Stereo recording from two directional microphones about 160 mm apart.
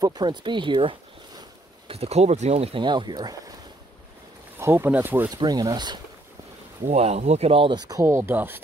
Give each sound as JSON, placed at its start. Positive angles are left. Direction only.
{"t": 0.0, "sound": "speech", "side_deg": -25}
{"t": 4.6, "sound": "speech", "side_deg": -15}
{"t": 5.3, "sound": "speech", "side_deg": -25}
{"t": 6.9, "sound": "speech", "side_deg": -45}
{"t": 7.9, "sound": "speech", "side_deg": -20}